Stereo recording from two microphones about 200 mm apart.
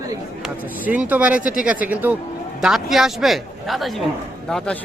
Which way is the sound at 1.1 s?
5° right (ahead or behind).